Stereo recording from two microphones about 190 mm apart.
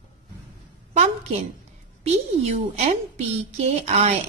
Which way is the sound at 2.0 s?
35° right (ahead or behind).